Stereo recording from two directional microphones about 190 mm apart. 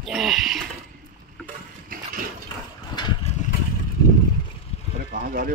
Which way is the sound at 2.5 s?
20° left (ahead or behind).